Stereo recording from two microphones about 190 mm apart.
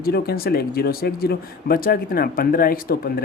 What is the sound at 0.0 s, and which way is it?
Speech, 55° left (ahead or behind).